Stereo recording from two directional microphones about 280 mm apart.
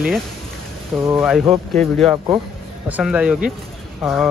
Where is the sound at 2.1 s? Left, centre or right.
Centre.